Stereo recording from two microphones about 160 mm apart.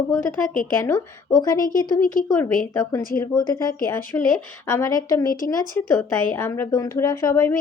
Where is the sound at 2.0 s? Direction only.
60° left (ahead or behind).